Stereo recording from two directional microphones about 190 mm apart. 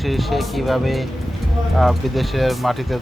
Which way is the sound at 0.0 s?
Centre (ahead or behind).